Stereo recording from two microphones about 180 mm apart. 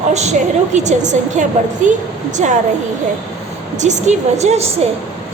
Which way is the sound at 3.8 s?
40° right (ahead or behind).